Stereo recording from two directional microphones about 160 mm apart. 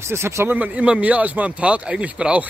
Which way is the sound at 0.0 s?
15° right (ahead or behind).